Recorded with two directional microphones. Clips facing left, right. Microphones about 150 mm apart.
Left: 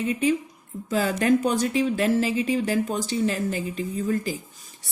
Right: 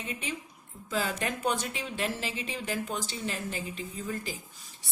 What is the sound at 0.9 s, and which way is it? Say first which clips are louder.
Speech: left 10 dB; 45° left (ahead or behind).